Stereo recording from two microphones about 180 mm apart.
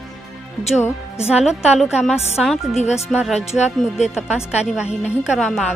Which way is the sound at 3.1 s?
5° right (ahead or behind).